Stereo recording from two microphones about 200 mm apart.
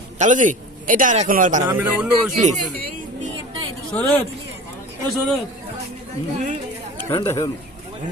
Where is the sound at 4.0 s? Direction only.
10° left (ahead or behind).